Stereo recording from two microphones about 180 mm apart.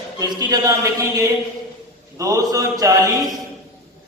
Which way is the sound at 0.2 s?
20° right (ahead or behind).